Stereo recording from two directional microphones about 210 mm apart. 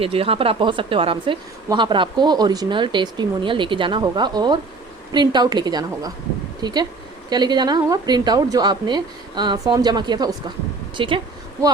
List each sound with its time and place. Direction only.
0.0 s speech: 25° right (ahead or behind)